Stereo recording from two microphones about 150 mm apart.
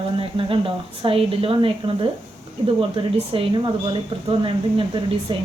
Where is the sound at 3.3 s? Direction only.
35° right (ahead or behind).